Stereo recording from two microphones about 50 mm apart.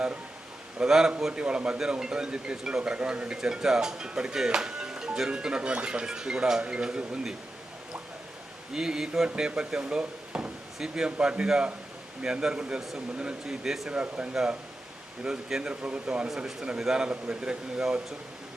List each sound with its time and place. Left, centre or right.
0.8 s speech: centre
8.7 s speech: centre
10.0 s a sound: right
10.8 s speech: centre
13.7 s speech: centre
13.9 s speech: right
15.2 s speech: centre
15.7 s speech: right